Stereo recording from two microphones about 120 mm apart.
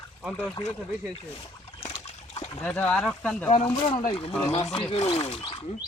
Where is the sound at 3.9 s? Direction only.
55° left (ahead or behind).